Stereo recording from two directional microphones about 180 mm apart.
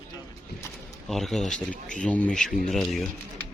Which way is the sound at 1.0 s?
Centre (ahead or behind).